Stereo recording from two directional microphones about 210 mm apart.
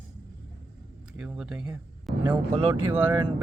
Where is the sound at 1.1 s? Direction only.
5° right (ahead or behind).